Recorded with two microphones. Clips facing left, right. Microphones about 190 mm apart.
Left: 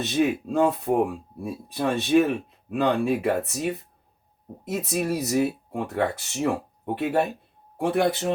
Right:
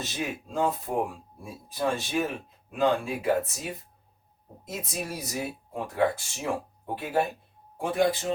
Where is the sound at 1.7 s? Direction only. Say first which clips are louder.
Left 7 dB; 65° left (ahead or behind).